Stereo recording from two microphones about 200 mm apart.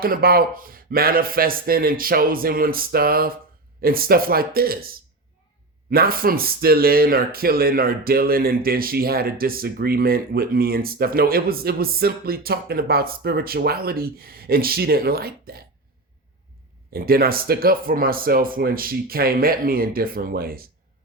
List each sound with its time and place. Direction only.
0.0 s speech: 50° right (ahead or behind)
16.9 s speech: 50° right (ahead or behind)